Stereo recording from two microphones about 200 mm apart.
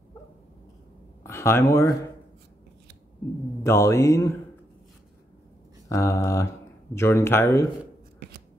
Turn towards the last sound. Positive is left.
turn(degrees=15)  # may be behind; listen again after turning